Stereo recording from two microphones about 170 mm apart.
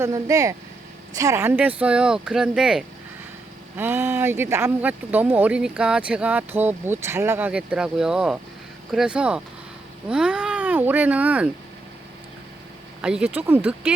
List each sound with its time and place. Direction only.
0.0 s speech: 20° right (ahead or behind)
13.0 s speech: 5° right (ahead or behind)